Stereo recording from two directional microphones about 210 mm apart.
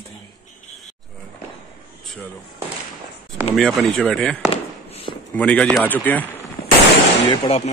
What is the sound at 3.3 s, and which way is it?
Speech, centre (ahead or behind).